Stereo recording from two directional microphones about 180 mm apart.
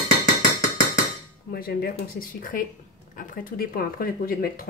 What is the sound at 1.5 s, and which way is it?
Speech, 55° left (ahead or behind).